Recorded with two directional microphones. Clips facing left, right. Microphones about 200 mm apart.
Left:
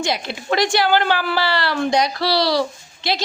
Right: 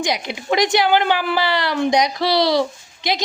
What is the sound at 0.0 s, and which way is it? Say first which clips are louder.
A woman's voice: even; 15° right (ahead or behind).